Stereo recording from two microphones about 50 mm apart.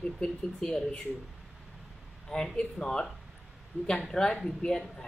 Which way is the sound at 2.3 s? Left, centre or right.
Centre.